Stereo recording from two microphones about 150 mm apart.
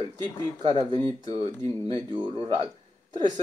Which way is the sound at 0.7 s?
30° right (ahead or behind).